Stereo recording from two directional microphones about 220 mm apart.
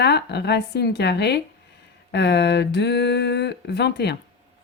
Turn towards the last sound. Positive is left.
turn(degrees=50)  # may be behind; listen again after turning